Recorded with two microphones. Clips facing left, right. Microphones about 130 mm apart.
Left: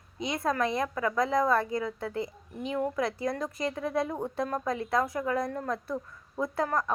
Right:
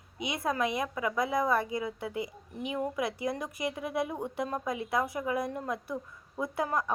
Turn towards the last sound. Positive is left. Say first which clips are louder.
# left 2 dB
turn(degrees=-10)  # may be behind; listen again after turning